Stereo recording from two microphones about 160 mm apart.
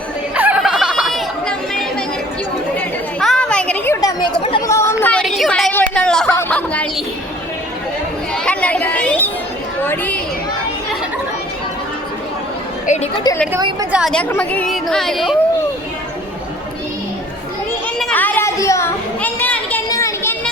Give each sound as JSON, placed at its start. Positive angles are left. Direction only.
{"t": 0.3, "sound": "chatter", "side_deg": -10}
{"t": 3.2, "sound": "a sound", "side_deg": 5}
{"t": 4.6, "sound": "chatter", "side_deg": 20}
{"t": 5.2, "sound": "a sound", "side_deg": 0}
{"t": 8.4, "sound": "a sound", "side_deg": 10}
{"t": 9.8, "sound": "chatter", "side_deg": 10}
{"t": 12.8, "sound": "chatter", "side_deg": 45}
{"t": 13.3, "sound": "a woman's voice", "side_deg": 25}
{"t": 13.6, "sound": "a woman's voice", "side_deg": -25}
{"t": 13.9, "sound": "speech", "side_deg": 0}
{"t": 14.3, "sound": "speech", "side_deg": 10}
{"t": 18.0, "sound": "a sound", "side_deg": 10}
{"t": 19.9, "sound": "children playing", "side_deg": 20}